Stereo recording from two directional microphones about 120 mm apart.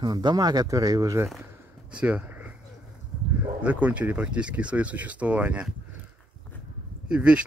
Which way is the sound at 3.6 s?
10° right (ahead or behind).